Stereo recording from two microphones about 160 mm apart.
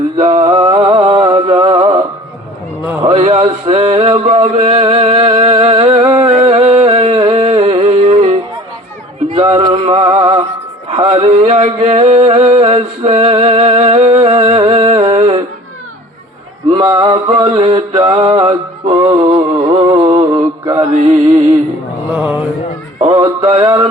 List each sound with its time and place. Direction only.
0.3 s music: 35° right (ahead or behind)
3.0 s a sound: 35° right (ahead or behind)
9.3 s music: 35° right (ahead or behind)
16.7 s mantra: 35° right (ahead or behind)
22.1 s mantra: 10° right (ahead or behind)
23.0 s music: 35° right (ahead or behind)